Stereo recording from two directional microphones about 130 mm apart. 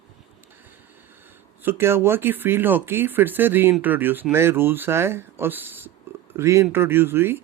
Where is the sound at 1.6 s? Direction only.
15° right (ahead or behind).